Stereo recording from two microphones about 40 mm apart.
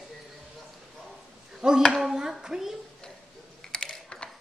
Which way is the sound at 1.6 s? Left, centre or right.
Centre.